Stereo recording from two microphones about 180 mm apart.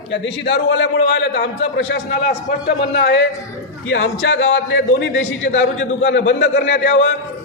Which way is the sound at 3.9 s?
90° left.